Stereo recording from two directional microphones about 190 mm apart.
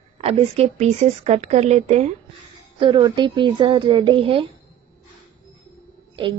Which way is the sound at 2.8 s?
25° right (ahead or behind).